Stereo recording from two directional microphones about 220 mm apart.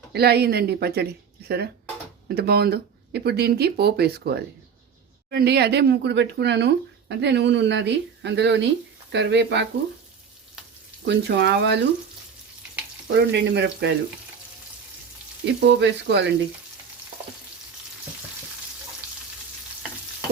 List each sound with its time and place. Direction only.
0.1 s speech: 45° right (ahead or behind)
11.0 s speech: 50° right (ahead or behind)
13.1 s speech: 50° right (ahead or behind)
15.4 s speech: 55° right (ahead or behind)